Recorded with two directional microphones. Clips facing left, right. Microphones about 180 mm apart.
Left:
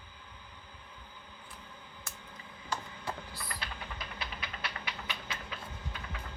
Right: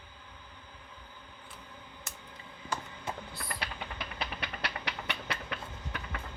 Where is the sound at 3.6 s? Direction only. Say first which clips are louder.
Right 3 dB; 70° right (ahead or behind).